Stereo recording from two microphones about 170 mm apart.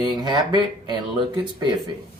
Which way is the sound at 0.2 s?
25° right (ahead or behind).